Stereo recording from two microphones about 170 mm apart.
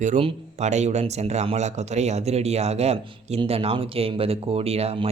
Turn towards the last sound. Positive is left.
turn(degrees=-35)  # may be behind; listen again after turning